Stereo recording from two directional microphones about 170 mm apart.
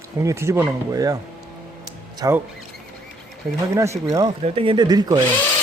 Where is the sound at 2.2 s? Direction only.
20° right (ahead or behind).